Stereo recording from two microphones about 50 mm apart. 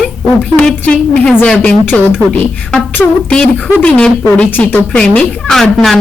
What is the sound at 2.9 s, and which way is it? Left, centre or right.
Speech, left.